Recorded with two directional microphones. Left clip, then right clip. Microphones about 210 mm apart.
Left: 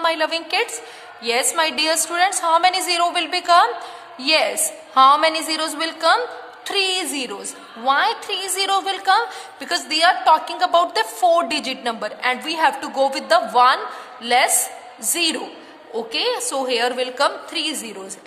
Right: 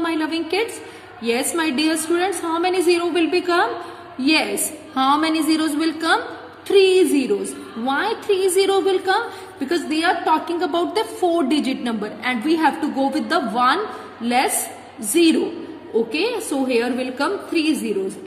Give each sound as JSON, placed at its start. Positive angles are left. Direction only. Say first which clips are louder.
{"t": 0.0, "sound": "a woman's voice", "louder": "left 3 dB", "side_deg": 40}
{"t": 16.1, "sound": "a woman's voice", "louder": "even", "side_deg": 40}